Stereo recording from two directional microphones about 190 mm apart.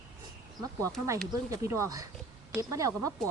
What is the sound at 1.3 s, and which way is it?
Speech, 15° right (ahead or behind).